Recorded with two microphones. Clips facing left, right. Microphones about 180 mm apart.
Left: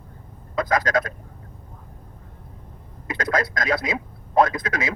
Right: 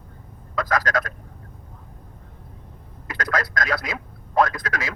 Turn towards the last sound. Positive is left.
turn(degrees=20)  # may be behind; listen again after turning